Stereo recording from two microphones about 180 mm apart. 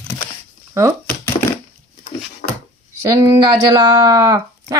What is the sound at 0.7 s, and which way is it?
Speech, 15° right (ahead or behind).